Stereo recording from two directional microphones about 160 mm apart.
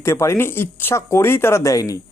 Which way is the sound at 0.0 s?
15° left (ahead or behind).